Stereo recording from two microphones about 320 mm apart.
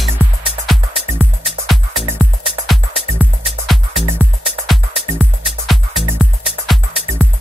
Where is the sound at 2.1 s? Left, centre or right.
Centre.